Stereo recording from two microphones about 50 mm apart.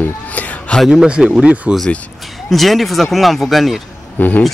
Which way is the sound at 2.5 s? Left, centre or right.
Centre.